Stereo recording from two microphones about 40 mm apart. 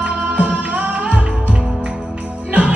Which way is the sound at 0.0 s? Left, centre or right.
Right.